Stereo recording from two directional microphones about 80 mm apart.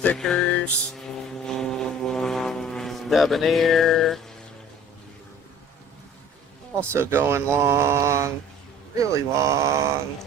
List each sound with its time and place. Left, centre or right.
0.2 s music: centre
1.5 s vehicle: centre
6.7 s speech: right